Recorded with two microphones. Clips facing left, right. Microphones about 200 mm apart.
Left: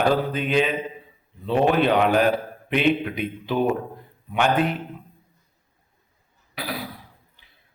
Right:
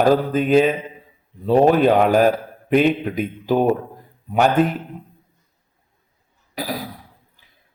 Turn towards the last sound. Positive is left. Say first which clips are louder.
# right 5 dB
turn(degrees=-40)  # may be behind; listen again after turning